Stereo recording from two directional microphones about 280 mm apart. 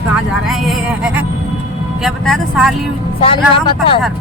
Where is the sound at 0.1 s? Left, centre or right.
Centre.